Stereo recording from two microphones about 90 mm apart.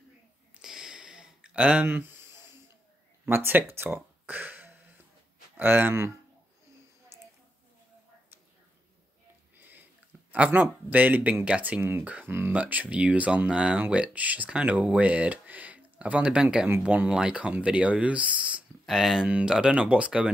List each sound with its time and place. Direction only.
0.6 s a sound: 5° right (ahead or behind)
3.3 s speech: 25° right (ahead or behind)
10.3 s speech: 15° right (ahead or behind)
18.9 s speech: 5° right (ahead or behind)